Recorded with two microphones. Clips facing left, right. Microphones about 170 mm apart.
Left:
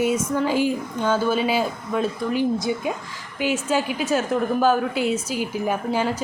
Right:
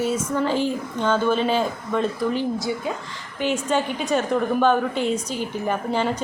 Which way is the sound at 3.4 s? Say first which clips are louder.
Even; 5° left (ahead or behind).